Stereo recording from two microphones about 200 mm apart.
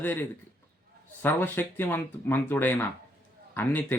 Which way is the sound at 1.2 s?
10° left (ahead or behind).